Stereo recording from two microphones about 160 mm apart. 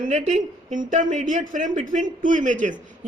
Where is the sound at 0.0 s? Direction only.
50° right (ahead or behind).